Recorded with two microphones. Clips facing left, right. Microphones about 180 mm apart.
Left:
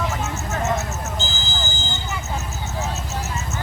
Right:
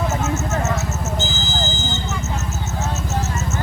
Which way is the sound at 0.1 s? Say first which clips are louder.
Right 5 dB; 20° right (ahead or behind).